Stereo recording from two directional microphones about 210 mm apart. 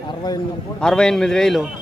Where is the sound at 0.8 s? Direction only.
5° left (ahead or behind).